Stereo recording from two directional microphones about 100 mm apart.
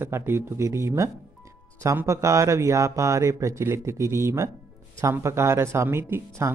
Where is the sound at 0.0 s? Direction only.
25° right (ahead or behind).